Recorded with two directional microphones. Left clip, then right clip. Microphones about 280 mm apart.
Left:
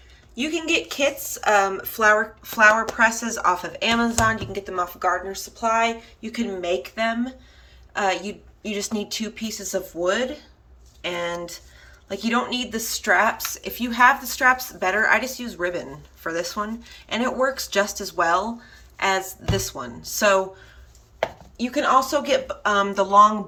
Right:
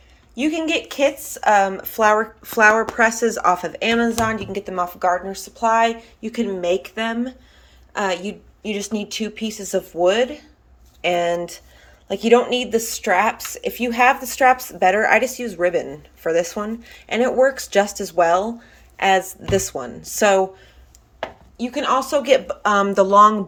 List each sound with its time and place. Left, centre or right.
0.3 s speech: centre
21.6 s a woman's voice: centre
22.1 s speech: centre